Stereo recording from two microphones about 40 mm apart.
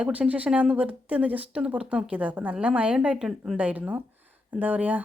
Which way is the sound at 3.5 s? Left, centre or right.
Right.